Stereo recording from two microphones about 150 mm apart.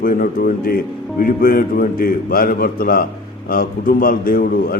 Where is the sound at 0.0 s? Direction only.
70° left (ahead or behind).